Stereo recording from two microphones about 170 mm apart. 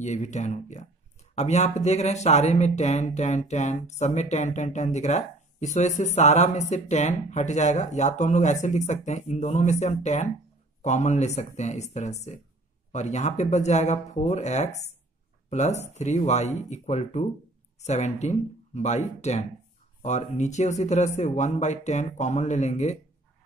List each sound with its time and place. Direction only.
0.0 s speech: 45° left (ahead or behind)